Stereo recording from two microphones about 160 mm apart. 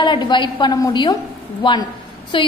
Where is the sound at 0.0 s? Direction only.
30° left (ahead or behind).